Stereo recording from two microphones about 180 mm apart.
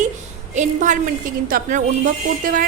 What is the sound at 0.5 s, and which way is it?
A woman's voice, 45° right (ahead or behind).